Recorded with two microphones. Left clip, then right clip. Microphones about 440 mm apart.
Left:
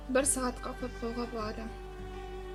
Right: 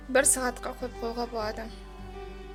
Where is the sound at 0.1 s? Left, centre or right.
Centre.